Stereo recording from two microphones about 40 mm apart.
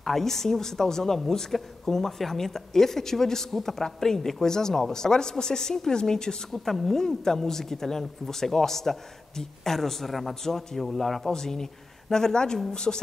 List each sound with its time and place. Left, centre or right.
0.0 s a woman's voice: centre